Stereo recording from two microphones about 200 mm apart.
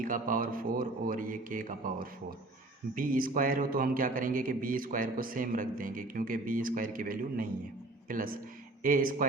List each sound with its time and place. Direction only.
0.0 s a man's voice: 45° right (ahead or behind)